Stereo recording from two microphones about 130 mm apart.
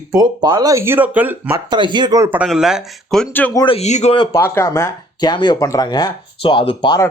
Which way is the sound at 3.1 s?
10° left (ahead or behind).